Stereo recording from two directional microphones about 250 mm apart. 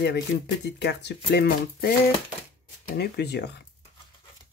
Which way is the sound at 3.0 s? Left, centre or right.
Left.